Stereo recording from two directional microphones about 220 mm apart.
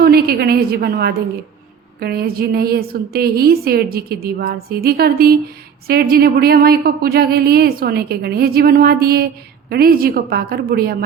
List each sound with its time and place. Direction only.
0.0 s a woman's voice: 45° right (ahead or behind)